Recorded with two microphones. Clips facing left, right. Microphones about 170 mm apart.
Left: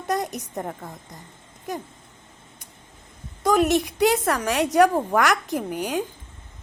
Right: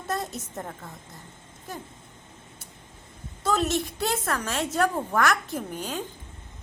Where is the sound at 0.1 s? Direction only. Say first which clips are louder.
Left 5 dB; 15° left (ahead or behind).